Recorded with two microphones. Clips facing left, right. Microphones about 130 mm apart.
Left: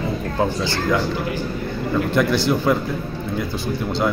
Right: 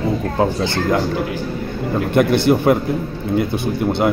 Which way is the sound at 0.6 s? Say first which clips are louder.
Right 3 dB; 55° right (ahead or behind).